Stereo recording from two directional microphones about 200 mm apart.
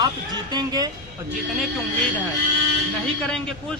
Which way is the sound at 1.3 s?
Centre (ahead or behind).